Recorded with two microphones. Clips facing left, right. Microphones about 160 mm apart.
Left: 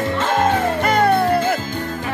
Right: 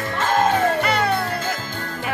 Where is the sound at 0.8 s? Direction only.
50° left (ahead or behind).